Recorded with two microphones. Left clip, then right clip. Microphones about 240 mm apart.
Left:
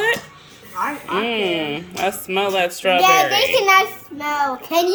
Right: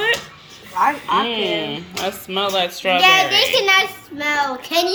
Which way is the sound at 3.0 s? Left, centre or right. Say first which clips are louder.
Right 2 dB; left.